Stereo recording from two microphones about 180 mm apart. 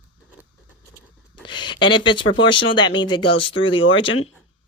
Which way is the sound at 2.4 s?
30° left (ahead or behind).